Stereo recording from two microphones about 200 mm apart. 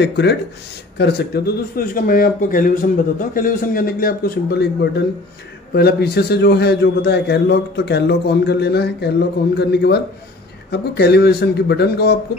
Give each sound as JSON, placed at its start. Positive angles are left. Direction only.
{"t": 0.0, "sound": "a man's voice", "side_deg": 60}